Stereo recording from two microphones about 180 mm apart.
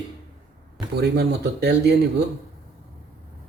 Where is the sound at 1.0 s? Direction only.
65° right (ahead or behind).